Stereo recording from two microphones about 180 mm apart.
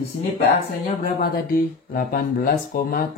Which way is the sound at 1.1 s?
55° left (ahead or behind).